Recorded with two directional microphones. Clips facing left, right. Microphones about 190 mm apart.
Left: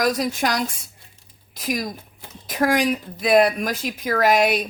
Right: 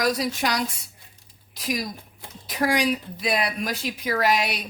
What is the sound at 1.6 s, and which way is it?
A woman's voice, 50° left (ahead or behind).